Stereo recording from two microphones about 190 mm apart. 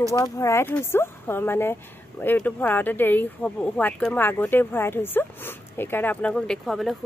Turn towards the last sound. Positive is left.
turn(degrees=0)  # may be behind; listen again after turning